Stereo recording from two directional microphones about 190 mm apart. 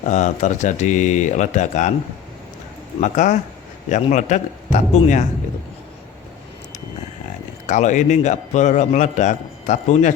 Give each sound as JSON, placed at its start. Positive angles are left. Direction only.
{"t": 0.0, "sound": "a man's voice", "side_deg": 40}
{"t": 3.0, "sound": "a man's voice", "side_deg": 40}
{"t": 7.7, "sound": "a man's voice", "side_deg": 40}